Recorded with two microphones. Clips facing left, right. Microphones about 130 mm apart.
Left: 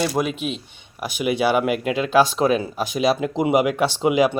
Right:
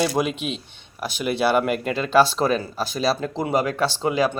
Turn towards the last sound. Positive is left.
turn(degrees=15)  # may be behind; listen again after turning